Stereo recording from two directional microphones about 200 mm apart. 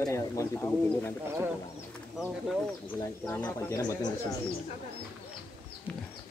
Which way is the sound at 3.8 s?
20° left (ahead or behind).